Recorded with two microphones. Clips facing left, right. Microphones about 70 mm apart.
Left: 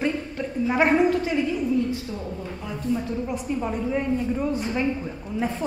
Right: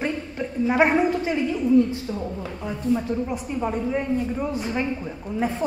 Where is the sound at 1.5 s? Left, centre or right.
Right.